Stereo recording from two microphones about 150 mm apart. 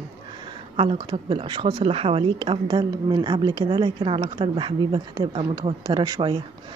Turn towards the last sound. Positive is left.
turn(degrees=-30)  # may be behind; listen again after turning